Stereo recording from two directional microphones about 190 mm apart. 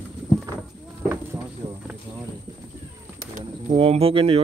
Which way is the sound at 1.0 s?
15° right (ahead or behind).